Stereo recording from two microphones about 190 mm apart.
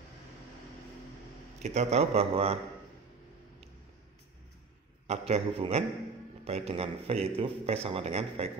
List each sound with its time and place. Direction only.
1.6 s a man's voice: 35° right (ahead or behind)
5.0 s a man's voice: 35° right (ahead or behind)